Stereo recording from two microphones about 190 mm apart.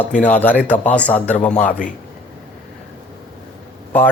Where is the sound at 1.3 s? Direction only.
40° left (ahead or behind).